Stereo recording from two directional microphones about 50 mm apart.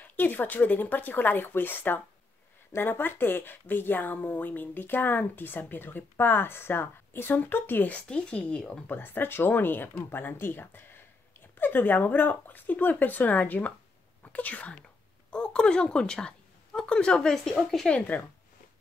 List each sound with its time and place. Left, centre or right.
0.0 s speech: left
8.1 s speech: left
8.8 s speech: left; by 17.9 s centre